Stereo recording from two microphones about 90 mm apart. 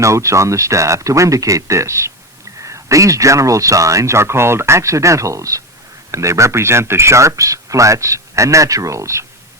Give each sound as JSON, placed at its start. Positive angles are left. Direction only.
{"t": 0.0, "sound": "speech", "side_deg": -35}